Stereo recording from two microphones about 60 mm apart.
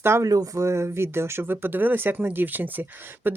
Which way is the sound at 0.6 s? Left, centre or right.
Right.